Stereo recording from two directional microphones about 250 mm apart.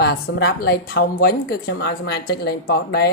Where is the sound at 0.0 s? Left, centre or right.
Left.